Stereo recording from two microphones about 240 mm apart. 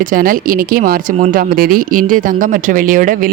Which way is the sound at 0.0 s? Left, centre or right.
Right.